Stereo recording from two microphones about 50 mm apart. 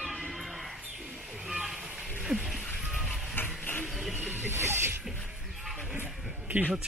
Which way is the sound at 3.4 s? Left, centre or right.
Left.